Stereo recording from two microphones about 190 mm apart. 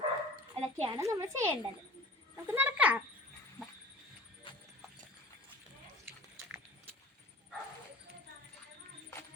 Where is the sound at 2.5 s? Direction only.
10° right (ahead or behind).